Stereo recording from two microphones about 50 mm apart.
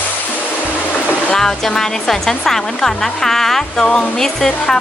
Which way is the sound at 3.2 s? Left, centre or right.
Centre.